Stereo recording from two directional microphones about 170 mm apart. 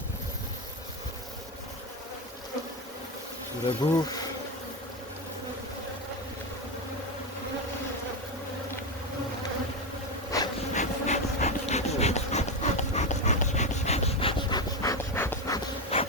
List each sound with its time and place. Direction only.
3.8 s speech: 25° left (ahead or behind)
10.3 s bee: 20° left (ahead or behind)
10.8 s pant: 45° left (ahead or behind); by 15.6 s 15° left (ahead or behind)
15.9 s insect: 35° left (ahead or behind)